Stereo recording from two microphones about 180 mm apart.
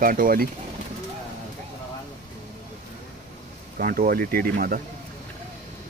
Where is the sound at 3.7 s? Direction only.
50° right (ahead or behind).